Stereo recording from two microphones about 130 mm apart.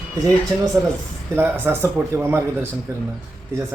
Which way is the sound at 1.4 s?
15° right (ahead or behind).